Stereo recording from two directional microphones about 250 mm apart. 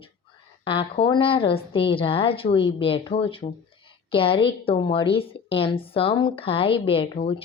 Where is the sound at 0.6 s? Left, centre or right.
Left.